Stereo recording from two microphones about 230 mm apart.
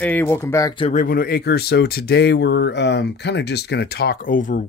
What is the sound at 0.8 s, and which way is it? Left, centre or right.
Speech, left.